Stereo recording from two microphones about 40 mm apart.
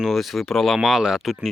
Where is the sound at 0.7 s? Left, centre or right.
Centre.